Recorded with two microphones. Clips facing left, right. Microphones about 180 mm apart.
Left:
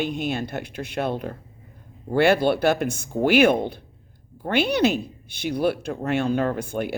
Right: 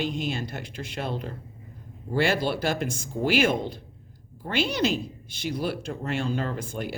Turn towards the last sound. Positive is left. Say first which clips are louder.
# left 6 dB
turn(degrees=60)  # may be behind; listen again after turning